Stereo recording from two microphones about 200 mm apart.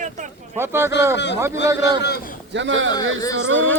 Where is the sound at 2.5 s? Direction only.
65° right (ahead or behind).